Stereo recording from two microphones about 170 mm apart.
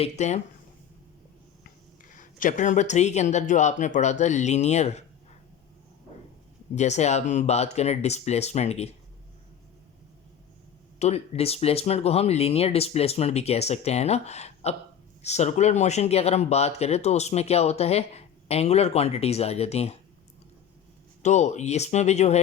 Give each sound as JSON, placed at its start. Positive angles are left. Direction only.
{"t": 0.0, "sound": "speech", "side_deg": 40}
{"t": 2.0, "sound": "speech", "side_deg": 50}
{"t": 6.7, "sound": "speech", "side_deg": 40}
{"t": 11.0, "sound": "speech", "side_deg": 35}
{"t": 21.2, "sound": "speech", "side_deg": 40}